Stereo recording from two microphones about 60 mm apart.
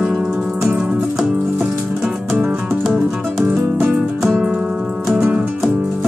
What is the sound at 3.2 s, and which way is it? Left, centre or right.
Music, right.